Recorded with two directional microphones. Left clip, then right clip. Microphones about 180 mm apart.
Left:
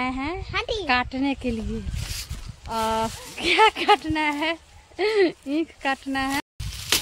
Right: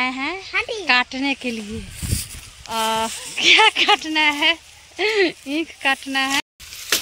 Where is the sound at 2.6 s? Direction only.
Centre (ahead or behind).